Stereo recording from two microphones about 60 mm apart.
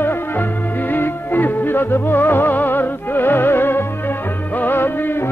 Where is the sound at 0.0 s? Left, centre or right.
Left.